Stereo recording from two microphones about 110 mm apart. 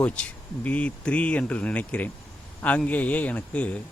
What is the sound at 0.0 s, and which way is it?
A man's voice, 10° left (ahead or behind).